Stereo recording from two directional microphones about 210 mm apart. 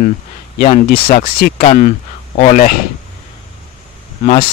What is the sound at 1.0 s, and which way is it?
Speech, 25° left (ahead or behind).